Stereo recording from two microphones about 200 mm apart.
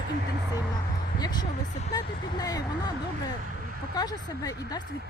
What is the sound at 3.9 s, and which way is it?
Speech, 20° left (ahead or behind).